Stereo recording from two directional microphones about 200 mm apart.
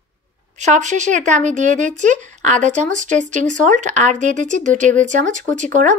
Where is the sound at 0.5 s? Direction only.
35° right (ahead or behind).